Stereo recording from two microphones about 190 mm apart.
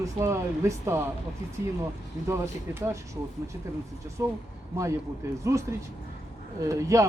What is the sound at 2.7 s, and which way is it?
Speech, 15° right (ahead or behind).